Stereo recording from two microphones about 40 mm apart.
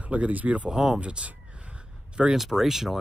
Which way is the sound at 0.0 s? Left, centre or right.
Right.